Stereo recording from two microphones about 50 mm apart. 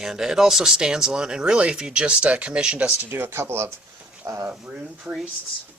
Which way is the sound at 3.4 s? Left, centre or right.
Right.